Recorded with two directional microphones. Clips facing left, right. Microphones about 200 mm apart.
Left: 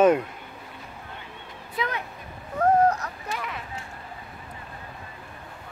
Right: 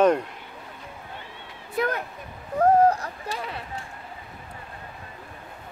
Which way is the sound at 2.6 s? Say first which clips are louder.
Right 2 dB; 30° right (ahead or behind).